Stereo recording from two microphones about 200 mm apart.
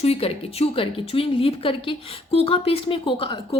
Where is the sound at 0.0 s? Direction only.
30° left (ahead or behind).